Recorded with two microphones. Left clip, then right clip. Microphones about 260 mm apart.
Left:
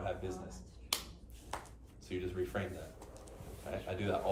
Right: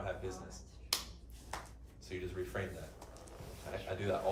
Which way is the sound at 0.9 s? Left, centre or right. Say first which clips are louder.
Even; left.